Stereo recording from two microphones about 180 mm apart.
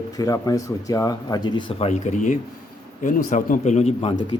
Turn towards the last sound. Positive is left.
turn(degrees=35)  # may be behind; listen again after turning